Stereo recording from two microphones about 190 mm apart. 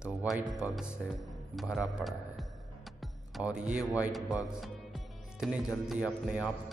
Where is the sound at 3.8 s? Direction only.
Centre (ahead or behind).